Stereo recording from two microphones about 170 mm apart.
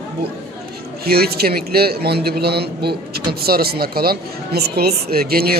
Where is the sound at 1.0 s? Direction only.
65° right (ahead or behind).